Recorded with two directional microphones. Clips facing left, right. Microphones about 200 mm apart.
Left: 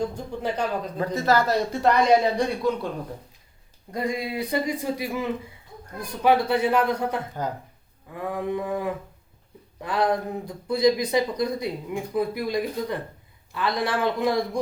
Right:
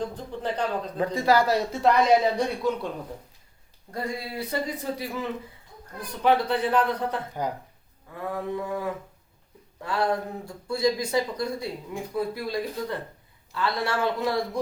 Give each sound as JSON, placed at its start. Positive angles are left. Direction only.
{"t": 0.0, "sound": "speech", "side_deg": 10}
{"t": 0.9, "sound": "a man's voice", "side_deg": -15}
{"t": 3.9, "sound": "speech", "side_deg": 15}